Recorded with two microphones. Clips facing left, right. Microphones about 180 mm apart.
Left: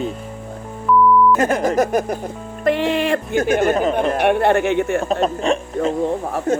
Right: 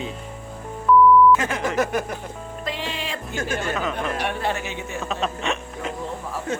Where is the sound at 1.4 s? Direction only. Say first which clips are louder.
Left 7 dB; 45° left (ahead or behind).